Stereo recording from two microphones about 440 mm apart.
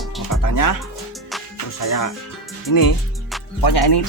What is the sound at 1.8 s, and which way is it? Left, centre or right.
Speech, left.